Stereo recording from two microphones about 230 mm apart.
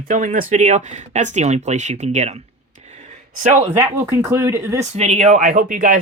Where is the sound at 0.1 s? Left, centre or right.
Right.